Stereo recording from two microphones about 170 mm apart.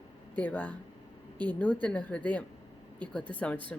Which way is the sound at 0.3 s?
10° left (ahead or behind).